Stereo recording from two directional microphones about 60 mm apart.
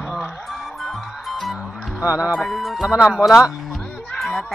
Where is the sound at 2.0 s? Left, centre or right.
Right.